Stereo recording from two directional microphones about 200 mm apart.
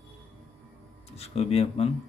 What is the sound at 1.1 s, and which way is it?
Speech, 30° left (ahead or behind).